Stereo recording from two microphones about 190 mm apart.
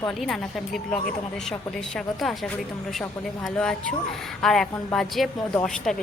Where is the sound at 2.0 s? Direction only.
Centre (ahead or behind).